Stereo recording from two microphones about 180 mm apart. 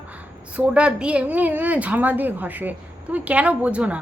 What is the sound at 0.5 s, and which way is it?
A woman's voice, 5° right (ahead or behind).